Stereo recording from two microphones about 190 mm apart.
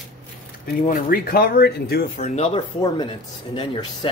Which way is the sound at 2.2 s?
35° left (ahead or behind).